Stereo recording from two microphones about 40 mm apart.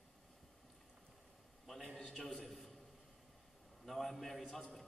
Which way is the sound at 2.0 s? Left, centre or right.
Centre.